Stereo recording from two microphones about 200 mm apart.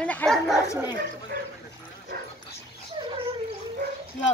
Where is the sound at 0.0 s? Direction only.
5° left (ahead or behind).